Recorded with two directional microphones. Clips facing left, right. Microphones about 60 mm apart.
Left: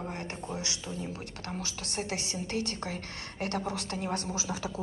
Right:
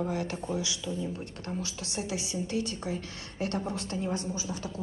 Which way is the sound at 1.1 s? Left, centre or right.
Left.